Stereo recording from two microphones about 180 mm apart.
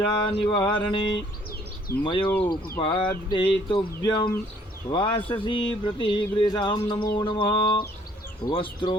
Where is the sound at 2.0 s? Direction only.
25° left (ahead or behind).